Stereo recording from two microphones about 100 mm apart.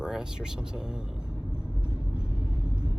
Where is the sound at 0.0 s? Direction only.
5° right (ahead or behind).